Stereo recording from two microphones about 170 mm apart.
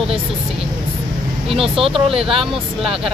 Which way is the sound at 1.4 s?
30° right (ahead or behind).